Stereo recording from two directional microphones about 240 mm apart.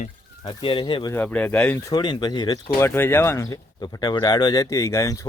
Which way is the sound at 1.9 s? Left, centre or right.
Centre.